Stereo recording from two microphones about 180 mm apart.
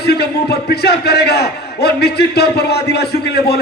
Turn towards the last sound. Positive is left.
turn(degrees=65)  # may be behind; listen again after turning